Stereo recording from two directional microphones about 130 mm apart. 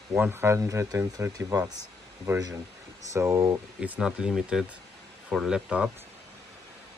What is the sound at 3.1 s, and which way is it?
Speech, 20° right (ahead or behind).